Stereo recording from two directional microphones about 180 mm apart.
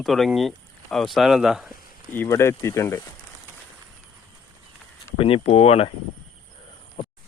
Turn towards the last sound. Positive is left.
turn(degrees=35)  # may be behind; listen again after turning